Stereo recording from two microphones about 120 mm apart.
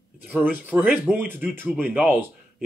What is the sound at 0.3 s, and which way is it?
A man's voice, 15° right (ahead or behind).